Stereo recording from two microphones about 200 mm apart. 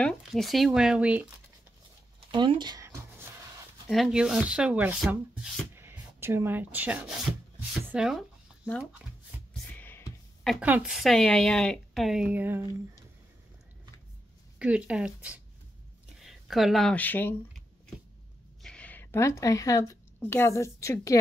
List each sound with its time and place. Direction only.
0.0 s speech: centre (ahead or behind)
2.3 s a sound: 25° right (ahead or behind)
3.8 s rub: centre (ahead or behind)
7.9 s speech: centre (ahead or behind)
9.8 s a sound: 10° left (ahead or behind)
10.5 s speech: 5° right (ahead or behind)
14.6 s speech: 5° right (ahead or behind); by 17.4 s 10° left (ahead or behind)
18.6 s a woman's voice: 5° left (ahead or behind)